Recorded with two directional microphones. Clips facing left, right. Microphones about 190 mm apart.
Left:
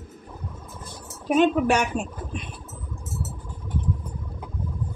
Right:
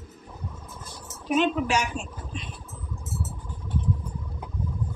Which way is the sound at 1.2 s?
55° left (ahead or behind).